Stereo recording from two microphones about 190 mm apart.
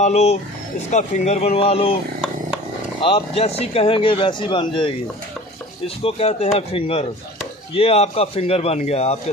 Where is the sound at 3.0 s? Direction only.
30° left (ahead or behind).